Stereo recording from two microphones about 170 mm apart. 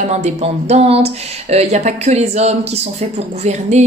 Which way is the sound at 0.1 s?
40° right (ahead or behind).